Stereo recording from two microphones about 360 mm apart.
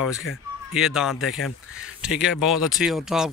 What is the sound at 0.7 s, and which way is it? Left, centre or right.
Speech, centre.